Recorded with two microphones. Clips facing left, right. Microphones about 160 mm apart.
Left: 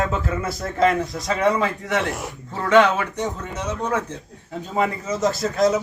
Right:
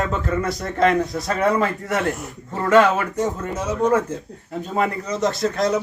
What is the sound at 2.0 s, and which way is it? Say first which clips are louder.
Speech: right 2 dB; 90° left.